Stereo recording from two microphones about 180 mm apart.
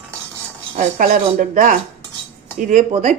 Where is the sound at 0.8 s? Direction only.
50° right (ahead or behind).